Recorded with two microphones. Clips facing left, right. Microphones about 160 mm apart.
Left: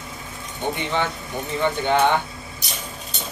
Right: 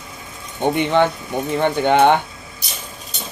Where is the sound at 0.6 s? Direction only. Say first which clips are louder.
Right 8 dB; 60° right (ahead or behind).